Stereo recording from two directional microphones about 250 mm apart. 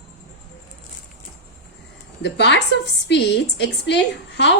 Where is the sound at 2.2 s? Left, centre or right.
Left.